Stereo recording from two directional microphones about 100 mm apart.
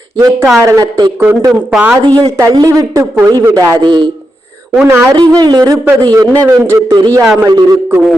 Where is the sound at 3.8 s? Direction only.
50° right (ahead or behind).